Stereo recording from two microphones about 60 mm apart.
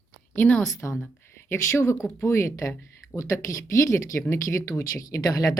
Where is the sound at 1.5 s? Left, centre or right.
Left.